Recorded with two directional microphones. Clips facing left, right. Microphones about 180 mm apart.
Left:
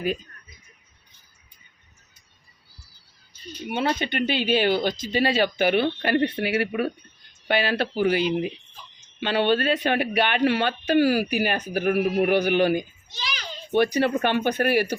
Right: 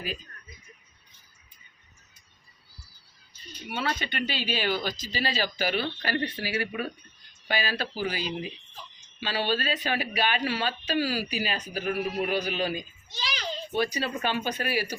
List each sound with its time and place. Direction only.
3.9 s speech: 55° left (ahead or behind)
13.1 s a sound: 30° right (ahead or behind)
13.7 s speech: 60° left (ahead or behind)